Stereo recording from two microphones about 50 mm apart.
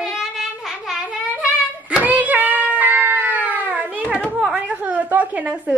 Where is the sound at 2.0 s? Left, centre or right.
Right.